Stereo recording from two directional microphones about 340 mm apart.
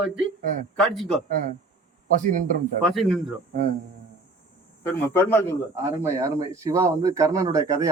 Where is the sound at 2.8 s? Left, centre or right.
Centre.